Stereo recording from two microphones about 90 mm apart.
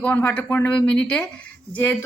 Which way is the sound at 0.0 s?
15° left (ahead or behind).